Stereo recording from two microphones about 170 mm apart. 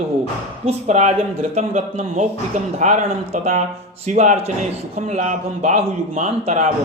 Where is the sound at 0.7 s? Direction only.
40° right (ahead or behind).